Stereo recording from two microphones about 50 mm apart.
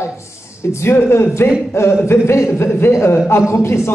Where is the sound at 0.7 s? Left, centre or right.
Left.